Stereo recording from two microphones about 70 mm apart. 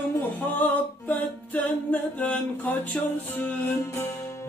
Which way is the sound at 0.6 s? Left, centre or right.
Left.